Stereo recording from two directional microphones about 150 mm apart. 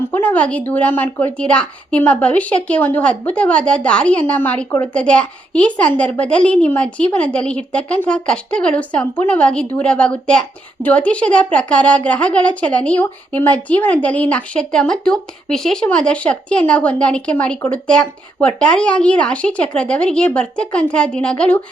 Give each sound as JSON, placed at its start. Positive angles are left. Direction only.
{"t": 0.1, "sound": "a woman's voice", "side_deg": 10}